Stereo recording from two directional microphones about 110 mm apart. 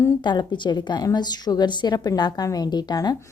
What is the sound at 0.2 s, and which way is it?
A woman's voice, 45° left (ahead or behind).